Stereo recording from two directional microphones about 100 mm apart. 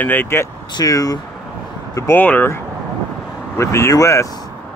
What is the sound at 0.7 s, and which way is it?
Speech, 35° left (ahead or behind).